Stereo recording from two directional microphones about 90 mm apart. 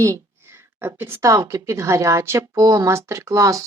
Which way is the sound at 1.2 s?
35° right (ahead or behind).